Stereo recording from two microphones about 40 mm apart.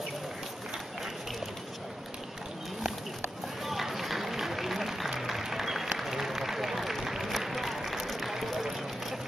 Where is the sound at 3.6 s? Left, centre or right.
Centre.